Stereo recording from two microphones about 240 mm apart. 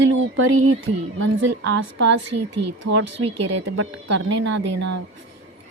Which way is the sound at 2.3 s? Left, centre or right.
Right.